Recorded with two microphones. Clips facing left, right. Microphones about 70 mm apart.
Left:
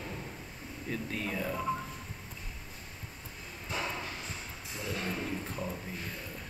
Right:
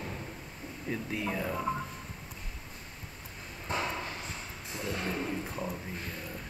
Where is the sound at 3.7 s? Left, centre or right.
Right.